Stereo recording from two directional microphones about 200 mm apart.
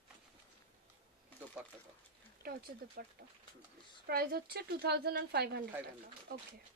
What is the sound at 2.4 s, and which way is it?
Speech, 50° right (ahead or behind).